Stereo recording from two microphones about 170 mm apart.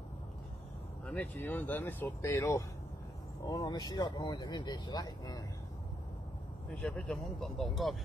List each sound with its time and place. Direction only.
1.0 s speech: 5° left (ahead or behind); by 5.4 s 25° left (ahead or behind)
6.7 s speech: 5° left (ahead or behind)